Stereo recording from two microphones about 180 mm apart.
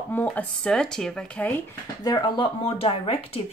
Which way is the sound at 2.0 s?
25° left (ahead or behind).